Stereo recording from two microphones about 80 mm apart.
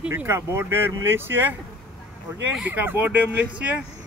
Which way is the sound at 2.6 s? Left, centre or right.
Right.